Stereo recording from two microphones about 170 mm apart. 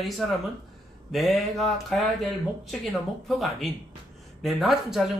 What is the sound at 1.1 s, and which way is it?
Speech, centre (ahead or behind).